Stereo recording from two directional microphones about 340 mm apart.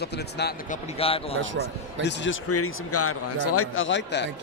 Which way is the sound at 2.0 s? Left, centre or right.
Left.